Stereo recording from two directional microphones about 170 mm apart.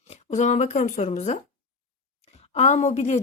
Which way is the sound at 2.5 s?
40° left (ahead or behind).